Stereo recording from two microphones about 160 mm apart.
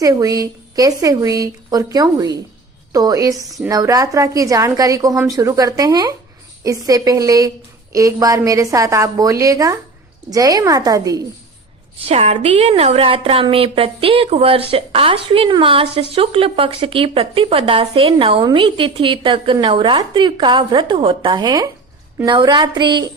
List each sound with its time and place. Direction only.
0.0 s a woman's voice: 20° right (ahead or behind)
12.0 s a woman's voice: 40° right (ahead or behind)